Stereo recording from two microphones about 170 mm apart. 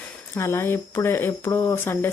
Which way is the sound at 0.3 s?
15° left (ahead or behind).